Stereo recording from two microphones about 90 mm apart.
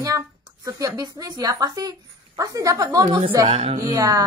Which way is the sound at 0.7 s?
40° right (ahead or behind).